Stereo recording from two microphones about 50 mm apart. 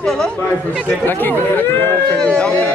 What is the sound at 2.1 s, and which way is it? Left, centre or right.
Speech, left.